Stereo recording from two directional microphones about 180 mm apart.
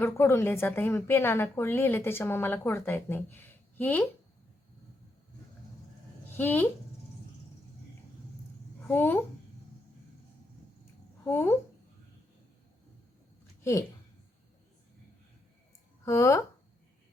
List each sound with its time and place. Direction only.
0.0 s a woman's voice: 15° left (ahead or behind)
6.3 s a woman's voice: 10° left (ahead or behind)
8.9 s a woman's voice: 10° left (ahead or behind)
11.3 s a woman's voice: 10° left (ahead or behind)
16.0 s a woman's voice: 15° left (ahead or behind)